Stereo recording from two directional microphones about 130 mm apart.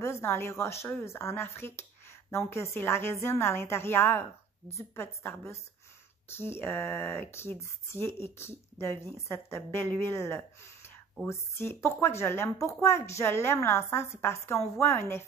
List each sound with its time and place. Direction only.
0.0 s a woman's voice: 20° left (ahead or behind)